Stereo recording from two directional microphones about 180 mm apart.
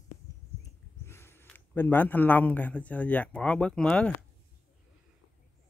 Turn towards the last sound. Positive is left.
turn(degrees=5)  # may be behind; listen again after turning